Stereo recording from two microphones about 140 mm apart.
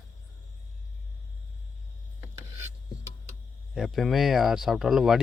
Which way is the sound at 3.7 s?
Centre (ahead or behind).